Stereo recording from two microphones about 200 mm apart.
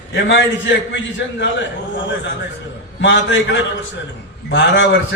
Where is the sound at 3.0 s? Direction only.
65° left (ahead or behind).